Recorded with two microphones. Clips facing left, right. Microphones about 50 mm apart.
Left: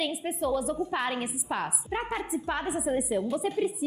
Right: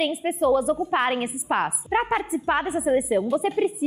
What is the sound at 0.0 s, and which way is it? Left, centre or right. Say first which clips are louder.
A woman's voice: right 7 dB; right.